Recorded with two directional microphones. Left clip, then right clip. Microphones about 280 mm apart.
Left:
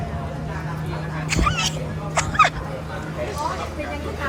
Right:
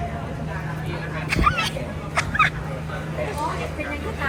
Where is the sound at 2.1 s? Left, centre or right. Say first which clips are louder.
Left 3 dB; centre.